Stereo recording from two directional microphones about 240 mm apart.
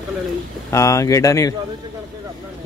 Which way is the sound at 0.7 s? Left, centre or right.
Centre.